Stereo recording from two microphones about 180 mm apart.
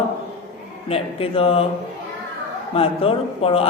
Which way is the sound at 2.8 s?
30° left (ahead or behind).